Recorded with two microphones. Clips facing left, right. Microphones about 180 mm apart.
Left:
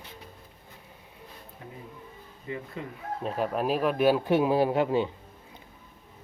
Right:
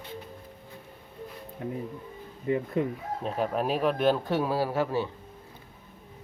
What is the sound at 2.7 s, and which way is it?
Chicken, 55° right (ahead or behind).